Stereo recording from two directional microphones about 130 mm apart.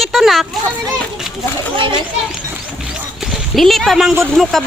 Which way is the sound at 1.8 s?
40° right (ahead or behind).